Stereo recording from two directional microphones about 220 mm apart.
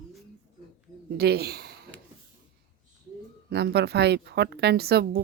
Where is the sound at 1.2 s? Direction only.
45° right (ahead or behind).